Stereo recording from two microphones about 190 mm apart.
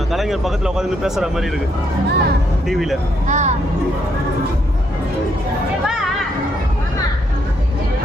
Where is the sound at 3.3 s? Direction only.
40° right (ahead or behind).